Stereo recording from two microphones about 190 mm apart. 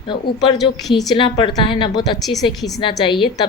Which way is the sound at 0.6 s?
Centre (ahead or behind).